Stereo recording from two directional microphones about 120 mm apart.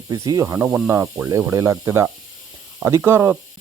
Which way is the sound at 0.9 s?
25° right (ahead or behind).